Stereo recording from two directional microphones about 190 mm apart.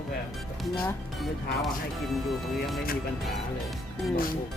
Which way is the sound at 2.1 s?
Centre (ahead or behind).